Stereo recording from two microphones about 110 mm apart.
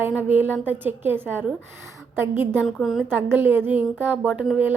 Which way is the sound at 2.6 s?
Centre (ahead or behind).